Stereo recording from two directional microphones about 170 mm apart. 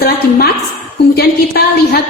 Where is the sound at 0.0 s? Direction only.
65° left (ahead or behind).